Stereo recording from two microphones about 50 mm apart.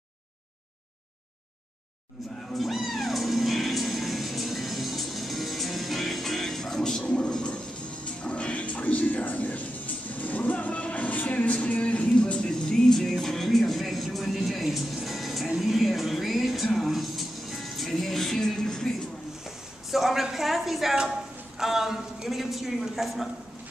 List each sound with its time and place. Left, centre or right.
2.5 s speech: centre; by 9.7 s left
10.1 s music: left; by 18.9 s centre
19.9 s speech: centre